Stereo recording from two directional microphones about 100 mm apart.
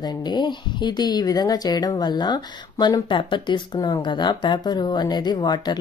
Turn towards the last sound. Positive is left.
turn(degrees=45)  # may be behind; listen again after turning